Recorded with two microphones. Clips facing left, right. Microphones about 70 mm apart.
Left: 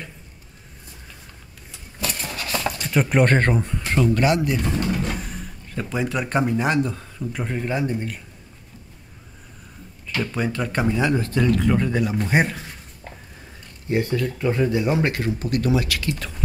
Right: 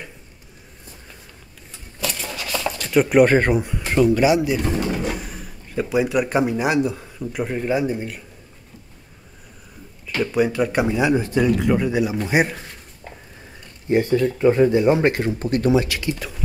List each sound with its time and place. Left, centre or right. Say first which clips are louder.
2.8 s speech: right 6 dB; centre
10.0 s speech: right 5 dB; centre
13.8 s speech: right 5 dB; right